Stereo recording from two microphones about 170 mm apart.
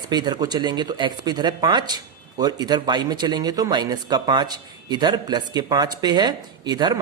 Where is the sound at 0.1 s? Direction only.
25° right (ahead or behind).